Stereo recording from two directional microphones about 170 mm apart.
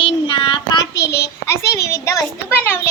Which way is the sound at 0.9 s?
75° left (ahead or behind).